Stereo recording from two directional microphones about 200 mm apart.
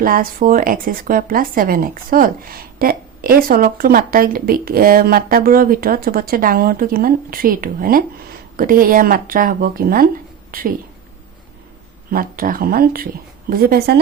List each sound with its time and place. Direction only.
0.0 s a woman's voice: 45° right (ahead or behind)
12.1 s a woman's voice: 45° right (ahead or behind)